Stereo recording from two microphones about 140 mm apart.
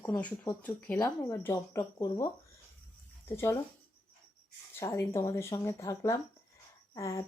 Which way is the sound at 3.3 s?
20° left (ahead or behind).